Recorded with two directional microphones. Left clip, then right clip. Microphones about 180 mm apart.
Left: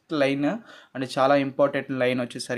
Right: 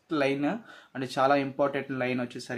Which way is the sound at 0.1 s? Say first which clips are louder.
Left 4 dB; 30° left (ahead or behind).